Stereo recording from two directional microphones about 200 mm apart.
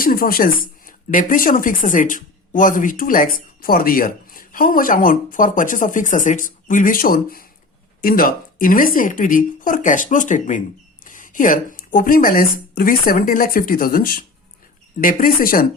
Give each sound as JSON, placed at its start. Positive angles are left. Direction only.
{"t": 0.0, "sound": "speech", "side_deg": 45}